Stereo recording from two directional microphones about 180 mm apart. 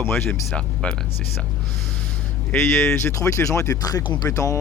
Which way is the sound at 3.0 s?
15° left (ahead or behind).